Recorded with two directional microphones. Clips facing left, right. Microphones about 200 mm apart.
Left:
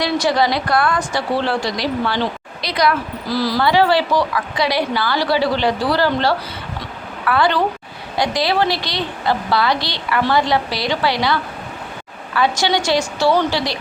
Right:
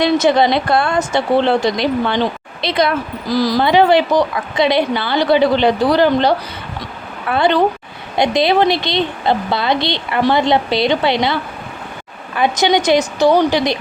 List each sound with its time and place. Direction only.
0.0 s a woman's voice: 20° right (ahead or behind)